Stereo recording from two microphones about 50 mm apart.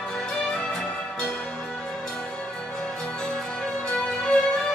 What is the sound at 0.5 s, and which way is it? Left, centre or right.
Music, centre.